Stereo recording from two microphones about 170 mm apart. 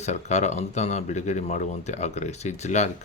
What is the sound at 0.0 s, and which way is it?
Speech, 45° left (ahead or behind).